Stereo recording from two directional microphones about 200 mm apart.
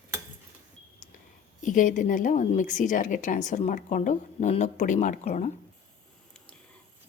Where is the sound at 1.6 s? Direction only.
40° left (ahead or behind).